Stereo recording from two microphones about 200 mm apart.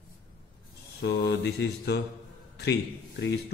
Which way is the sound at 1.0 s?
55° left (ahead or behind).